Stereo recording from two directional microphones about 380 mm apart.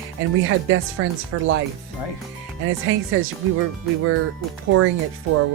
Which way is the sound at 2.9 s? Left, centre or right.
Right.